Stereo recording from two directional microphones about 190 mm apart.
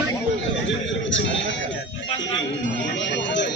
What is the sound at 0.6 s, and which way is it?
Speech, 75° left (ahead or behind).